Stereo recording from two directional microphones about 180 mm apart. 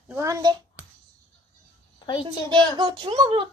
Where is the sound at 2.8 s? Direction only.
30° right (ahead or behind).